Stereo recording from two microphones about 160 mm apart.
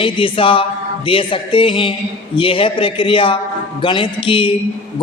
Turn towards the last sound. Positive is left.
turn(degrees=30)  # may be behind; listen again after turning